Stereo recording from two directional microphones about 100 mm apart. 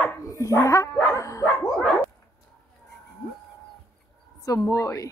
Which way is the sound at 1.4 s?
10° left (ahead or behind).